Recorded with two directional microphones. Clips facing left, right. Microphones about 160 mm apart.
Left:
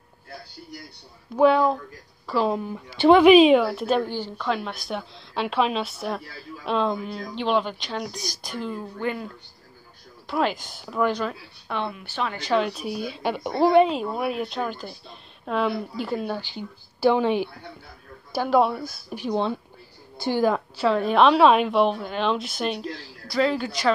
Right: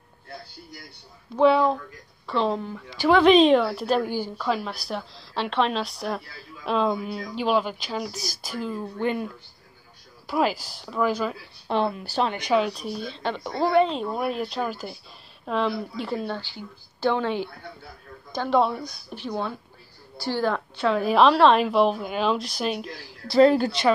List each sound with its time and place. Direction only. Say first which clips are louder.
1.4 s a woman's voice: left 1 dB; centre (ahead or behind); by 3.3 s 20° left (ahead or behind)
3.3 s a woman's voice: left 2 dB; 5° left (ahead or behind)
4.0 s a woman's voice: right 1 dB; 10° right (ahead or behind)
9.0 s speech: right 3 dB; 20° right (ahead or behind)
10.2 s a woman's voice: right 1 dB; 5° right (ahead or behind)
11.6 s speech: right 5 dB; 35° right (ahead or behind)
12.3 s speech: right 1 dB; 15° right (ahead or behind)
12.5 s speech: left 1 dB; centre (ahead or behind); by 13.9 s 15° left (ahead or behind)
13.9 s a woman's voice: left 1 dB; 5° left (ahead or behind)
23.4 s speech: right 7 dB; 40° right (ahead or behind)